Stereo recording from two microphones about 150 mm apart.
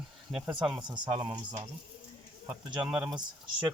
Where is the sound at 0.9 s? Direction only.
30° right (ahead or behind).